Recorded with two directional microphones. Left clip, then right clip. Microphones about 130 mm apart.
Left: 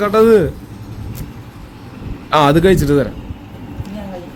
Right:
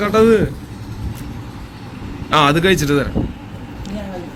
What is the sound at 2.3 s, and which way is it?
Speech, 50° left (ahead or behind).